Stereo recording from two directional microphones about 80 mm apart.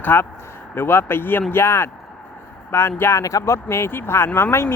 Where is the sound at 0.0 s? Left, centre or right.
Left.